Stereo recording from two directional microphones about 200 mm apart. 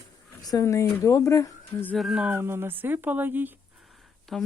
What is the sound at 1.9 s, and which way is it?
Speech, centre (ahead or behind).